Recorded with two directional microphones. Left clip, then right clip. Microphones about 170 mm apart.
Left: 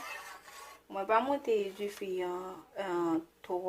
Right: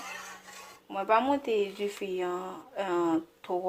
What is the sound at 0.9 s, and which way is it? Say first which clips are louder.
Speech: right 4 dB; 40° right (ahead or behind).